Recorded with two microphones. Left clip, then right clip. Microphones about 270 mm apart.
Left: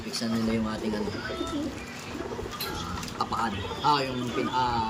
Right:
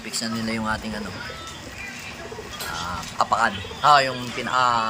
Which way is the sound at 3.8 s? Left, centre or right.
Centre.